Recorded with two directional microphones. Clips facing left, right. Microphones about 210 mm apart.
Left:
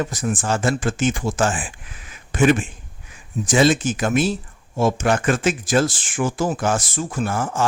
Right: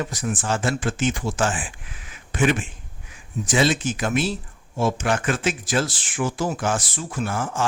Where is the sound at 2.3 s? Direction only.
45° left (ahead or behind).